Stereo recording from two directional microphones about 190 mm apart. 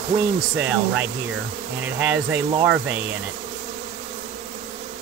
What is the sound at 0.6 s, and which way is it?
Speech, 5° right (ahead or behind).